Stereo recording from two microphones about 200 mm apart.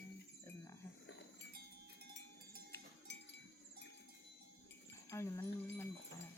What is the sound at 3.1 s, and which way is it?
Cowbell, 60° left (ahead or behind).